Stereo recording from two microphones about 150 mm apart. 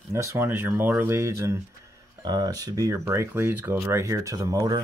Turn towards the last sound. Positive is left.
turn(degrees=-20)  # may be behind; listen again after turning